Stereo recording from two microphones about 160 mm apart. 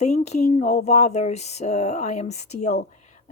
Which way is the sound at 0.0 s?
45° left (ahead or behind).